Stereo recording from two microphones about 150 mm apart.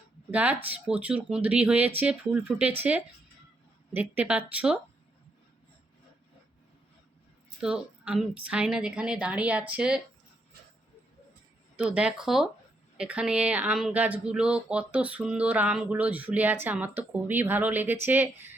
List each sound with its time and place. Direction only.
0.3 s speech: 10° right (ahead or behind)
7.6 s speech: 5° right (ahead or behind)
11.8 s speech: 5° right (ahead or behind)